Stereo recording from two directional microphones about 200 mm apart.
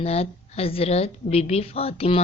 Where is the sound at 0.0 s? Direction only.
30° left (ahead or behind).